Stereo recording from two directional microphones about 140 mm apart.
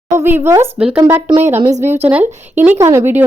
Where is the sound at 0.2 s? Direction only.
15° right (ahead or behind).